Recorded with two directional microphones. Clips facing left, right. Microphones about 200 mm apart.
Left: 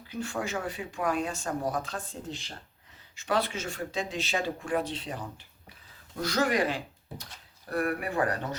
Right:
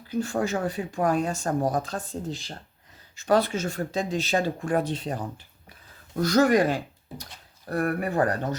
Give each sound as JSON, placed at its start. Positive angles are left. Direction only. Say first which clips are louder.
{"t": 0.1, "sound": "speech", "louder": "right 7 dB", "side_deg": -40}